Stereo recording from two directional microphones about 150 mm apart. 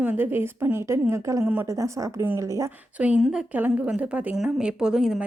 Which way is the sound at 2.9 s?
10° right (ahead or behind).